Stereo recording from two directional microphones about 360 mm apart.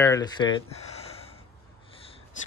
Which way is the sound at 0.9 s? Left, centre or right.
Centre.